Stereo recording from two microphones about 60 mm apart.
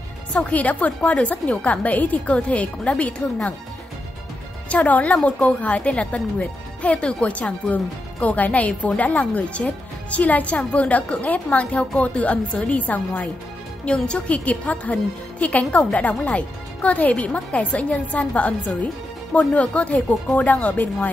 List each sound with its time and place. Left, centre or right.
0.3 s a woman's voice: left
4.6 s a woman's voice: left
13.8 s a woman's voice: centre